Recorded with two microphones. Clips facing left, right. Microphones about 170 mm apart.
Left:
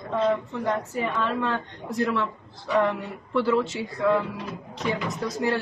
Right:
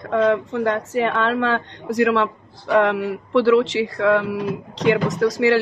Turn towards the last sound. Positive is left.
turn(degrees=-90)